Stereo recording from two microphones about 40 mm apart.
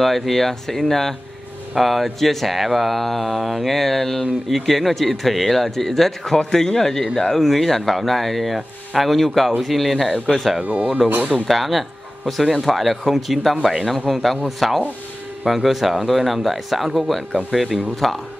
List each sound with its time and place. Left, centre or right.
0.0 s speech: centre
10.6 s speech: right
11.3 s speech: centre